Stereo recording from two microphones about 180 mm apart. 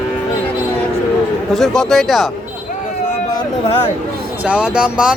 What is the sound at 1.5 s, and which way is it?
Speech, 5° left (ahead or behind).